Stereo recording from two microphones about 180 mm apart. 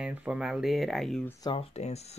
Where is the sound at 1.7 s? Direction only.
35° left (ahead or behind).